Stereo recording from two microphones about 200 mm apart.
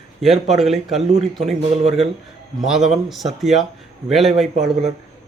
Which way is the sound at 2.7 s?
Centre (ahead or behind).